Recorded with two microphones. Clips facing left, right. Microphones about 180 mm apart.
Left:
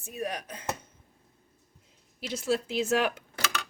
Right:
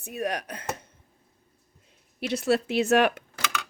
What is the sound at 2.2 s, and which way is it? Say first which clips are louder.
Speech: right 5 dB; 65° right (ahead or behind).